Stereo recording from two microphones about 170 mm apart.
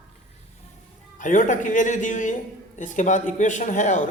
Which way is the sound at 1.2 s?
50° left (ahead or behind).